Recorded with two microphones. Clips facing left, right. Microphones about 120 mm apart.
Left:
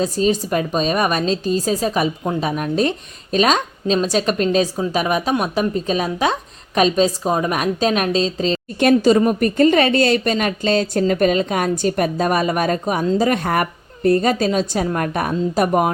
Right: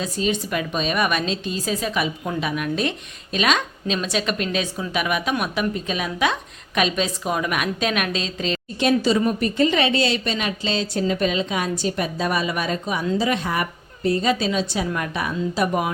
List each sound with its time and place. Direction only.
0.0 s a woman's voice: 35° left (ahead or behind)
8.8 s a woman's voice: 50° left (ahead or behind)